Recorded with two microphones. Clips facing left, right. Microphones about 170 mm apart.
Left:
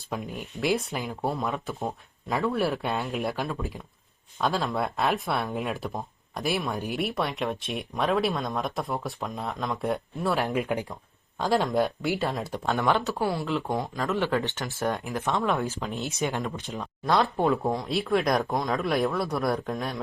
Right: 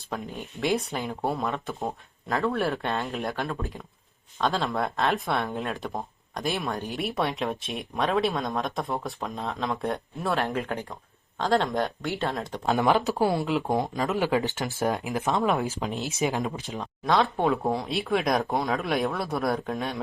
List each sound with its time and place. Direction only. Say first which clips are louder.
0.1 s speech: left 1 dB; 5° left (ahead or behind)
10.4 s speech: left 2 dB; 15° left (ahead or behind)
13.0 s speech: right 3 dB; 20° right (ahead or behind)
14.8 s speech: right 1 dB; centre (ahead or behind)